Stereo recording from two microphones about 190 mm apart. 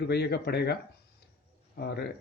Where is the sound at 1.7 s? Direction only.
60° left (ahead or behind).